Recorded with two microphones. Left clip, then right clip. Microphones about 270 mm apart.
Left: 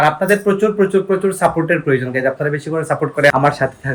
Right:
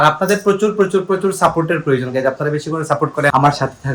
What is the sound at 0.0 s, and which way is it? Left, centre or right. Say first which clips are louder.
Speech: even; centre.